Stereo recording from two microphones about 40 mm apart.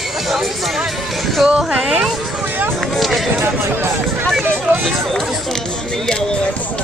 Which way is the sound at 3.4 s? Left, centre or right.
Right.